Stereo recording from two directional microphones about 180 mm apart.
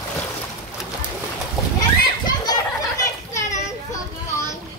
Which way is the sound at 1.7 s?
20° left (ahead or behind).